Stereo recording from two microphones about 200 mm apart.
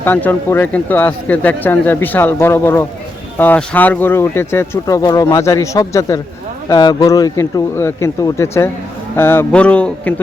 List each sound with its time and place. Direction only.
0.0 s speech: 10° left (ahead or behind)